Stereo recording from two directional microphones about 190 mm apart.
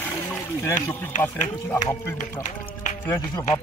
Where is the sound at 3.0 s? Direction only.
15° left (ahead or behind).